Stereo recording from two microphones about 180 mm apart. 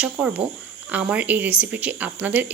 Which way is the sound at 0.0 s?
10° right (ahead or behind).